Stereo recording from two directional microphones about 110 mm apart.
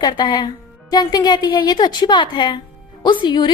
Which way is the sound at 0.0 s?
40° left (ahead or behind).